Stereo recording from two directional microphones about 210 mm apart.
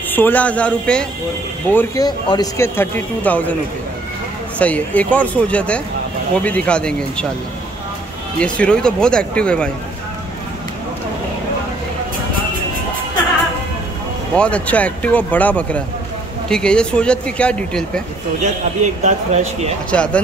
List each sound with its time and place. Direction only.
0.1 s speech: 10° left (ahead or behind)
4.6 s speech: 5° left (ahead or behind)
8.4 s speech: 5° left (ahead or behind)
14.3 s speech: 5° left (ahead or behind)
19.0 s speech: 35° right (ahead or behind)
19.9 s speech: 5° left (ahead or behind)